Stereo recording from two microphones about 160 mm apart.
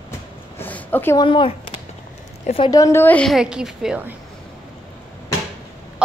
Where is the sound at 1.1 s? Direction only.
30° left (ahead or behind).